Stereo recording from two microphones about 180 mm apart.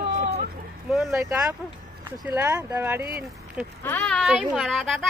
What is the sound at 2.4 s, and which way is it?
Speech, 15° right (ahead or behind).